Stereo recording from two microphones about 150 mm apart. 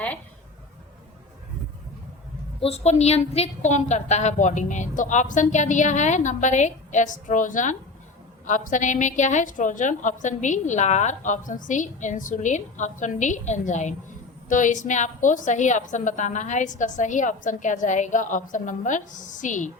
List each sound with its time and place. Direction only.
2.6 s a woman's voice: 45° left (ahead or behind)